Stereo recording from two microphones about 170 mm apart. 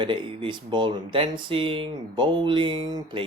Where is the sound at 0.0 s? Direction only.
30° right (ahead or behind).